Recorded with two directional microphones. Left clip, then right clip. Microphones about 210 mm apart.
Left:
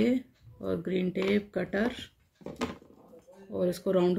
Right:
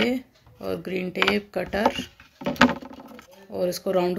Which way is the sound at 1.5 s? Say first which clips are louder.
Right 5 dB; 10° left (ahead or behind).